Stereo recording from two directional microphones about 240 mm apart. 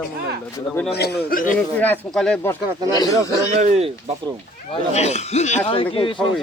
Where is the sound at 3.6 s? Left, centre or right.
Right.